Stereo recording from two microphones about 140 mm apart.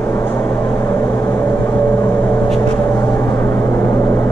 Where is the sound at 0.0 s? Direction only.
15° left (ahead or behind).